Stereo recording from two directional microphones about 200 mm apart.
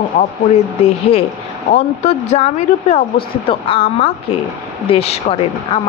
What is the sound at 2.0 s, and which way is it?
A woman's voice, 35° left (ahead or behind).